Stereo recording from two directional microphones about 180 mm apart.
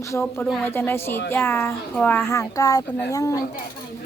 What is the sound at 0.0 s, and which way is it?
A woman's voice, 15° left (ahead or behind).